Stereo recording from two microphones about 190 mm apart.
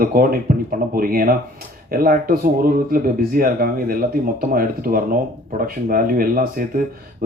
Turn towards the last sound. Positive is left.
turn(degrees=-50)  # may be behind; listen again after turning